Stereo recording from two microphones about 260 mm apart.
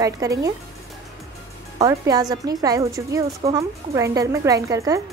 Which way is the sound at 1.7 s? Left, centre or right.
Centre.